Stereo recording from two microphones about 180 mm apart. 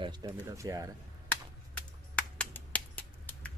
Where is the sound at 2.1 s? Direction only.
5° left (ahead or behind).